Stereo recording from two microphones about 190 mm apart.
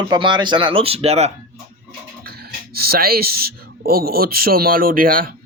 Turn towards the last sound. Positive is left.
turn(degrees=-50)  # may be behind; listen again after turning